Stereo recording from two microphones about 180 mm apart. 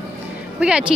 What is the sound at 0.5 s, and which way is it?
Speech, 5° right (ahead or behind).